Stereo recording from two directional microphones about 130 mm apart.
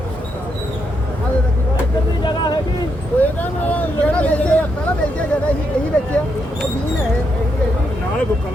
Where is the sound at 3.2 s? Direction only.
15° left (ahead or behind).